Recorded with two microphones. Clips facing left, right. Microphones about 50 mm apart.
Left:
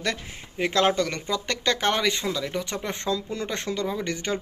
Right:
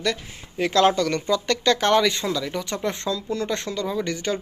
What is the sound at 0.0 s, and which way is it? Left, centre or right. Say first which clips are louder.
Speech: right 3 dB; left.